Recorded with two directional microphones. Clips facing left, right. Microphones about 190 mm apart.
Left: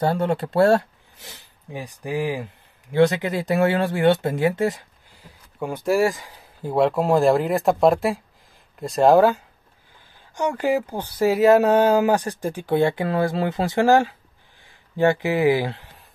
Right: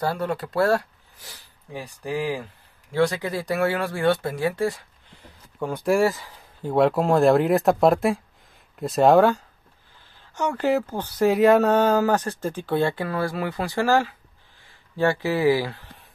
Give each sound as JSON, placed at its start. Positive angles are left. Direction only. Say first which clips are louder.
{"t": 0.0, "sound": "speech", "louder": "left 4 dB", "side_deg": 25}
{"t": 5.8, "sound": "speech", "louder": "left 1 dB", "side_deg": 0}
{"t": 6.0, "sound": "speech", "louder": "even", "side_deg": 15}
{"t": 6.7, "sound": "speech", "louder": "even", "side_deg": 0}
{"t": 10.3, "sound": "speech", "louder": "left 1 dB", "side_deg": 15}